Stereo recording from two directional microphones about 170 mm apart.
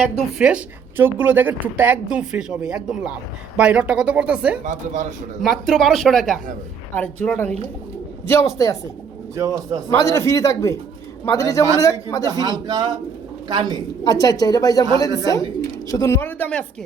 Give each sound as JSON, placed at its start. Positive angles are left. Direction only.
{"t": 0.2, "sound": "a woman's voice", "side_deg": -5}
{"t": 4.6, "sound": "speech", "side_deg": -45}
{"t": 5.4, "sound": "a man's voice", "side_deg": 0}
{"t": 8.3, "sound": "speech", "side_deg": 20}
{"t": 9.3, "sound": "speech", "side_deg": -20}
{"t": 9.9, "sound": "a man's voice", "side_deg": 15}
{"t": 12.2, "sound": "speech", "side_deg": -25}
{"t": 14.1, "sound": "speech", "side_deg": 20}
{"t": 15.9, "sound": "a man's voice", "side_deg": 15}